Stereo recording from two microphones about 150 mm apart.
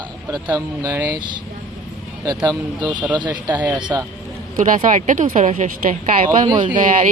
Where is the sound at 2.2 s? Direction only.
25° right (ahead or behind).